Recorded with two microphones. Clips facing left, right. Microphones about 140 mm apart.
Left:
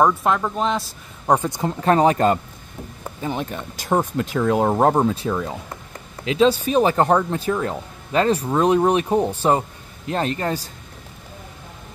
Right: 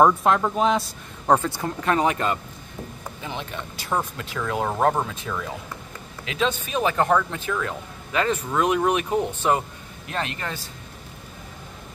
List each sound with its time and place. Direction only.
0.0 s speech: centre (ahead or behind)
1.2 s speech: 15° left (ahead or behind)
1.9 s speech: 35° left (ahead or behind)